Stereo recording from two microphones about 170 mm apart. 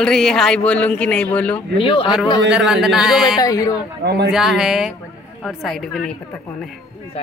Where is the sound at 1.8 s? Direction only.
30° left (ahead or behind).